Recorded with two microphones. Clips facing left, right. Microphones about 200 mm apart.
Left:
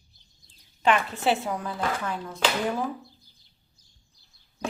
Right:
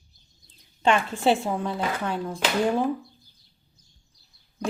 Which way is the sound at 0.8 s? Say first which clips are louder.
Right 2 dB; 30° right (ahead or behind).